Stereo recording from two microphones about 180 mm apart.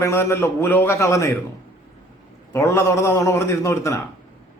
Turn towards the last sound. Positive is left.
turn(degrees=15)  # may be behind; listen again after turning